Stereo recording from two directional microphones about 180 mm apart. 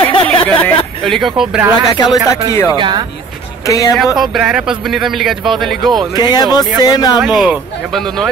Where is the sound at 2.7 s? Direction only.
25° right (ahead or behind).